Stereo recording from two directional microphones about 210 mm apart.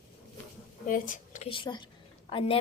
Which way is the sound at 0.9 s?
40° left (ahead or behind).